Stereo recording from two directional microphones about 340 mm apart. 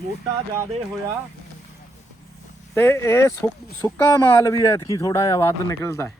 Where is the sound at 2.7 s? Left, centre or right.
Centre.